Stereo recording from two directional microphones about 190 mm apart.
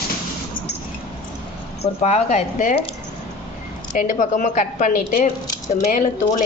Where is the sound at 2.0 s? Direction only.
35° left (ahead or behind).